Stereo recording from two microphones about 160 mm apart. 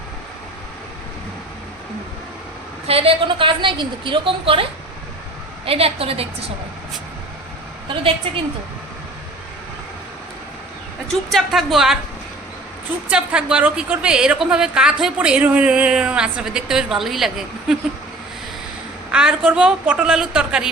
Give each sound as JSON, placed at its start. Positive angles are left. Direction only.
{"t": 2.8, "sound": "a woman's voice", "side_deg": -35}
{"t": 5.6, "sound": "a woman's voice", "side_deg": -35}
{"t": 8.3, "sound": "a woman's voice", "side_deg": -35}
{"t": 11.1, "sound": "a woman's voice", "side_deg": 0}
{"t": 13.1, "sound": "a woman's voice", "side_deg": -5}
{"t": 19.1, "sound": "a woman's voice", "side_deg": -5}